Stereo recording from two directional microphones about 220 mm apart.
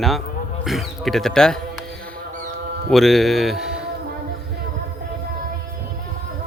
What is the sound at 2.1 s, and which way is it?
Rodents, 40° right (ahead or behind).